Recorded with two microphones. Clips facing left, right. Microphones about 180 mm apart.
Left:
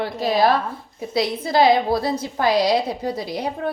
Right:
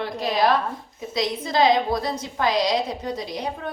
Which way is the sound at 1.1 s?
30° left (ahead or behind).